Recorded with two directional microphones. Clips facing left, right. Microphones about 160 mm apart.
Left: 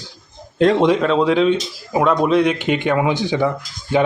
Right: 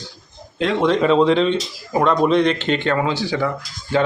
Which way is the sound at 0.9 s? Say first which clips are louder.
Right 1 dB; centre (ahead or behind).